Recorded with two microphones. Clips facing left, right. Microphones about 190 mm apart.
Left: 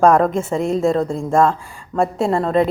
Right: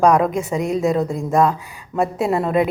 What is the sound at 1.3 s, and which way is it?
Speech, 15° right (ahead or behind).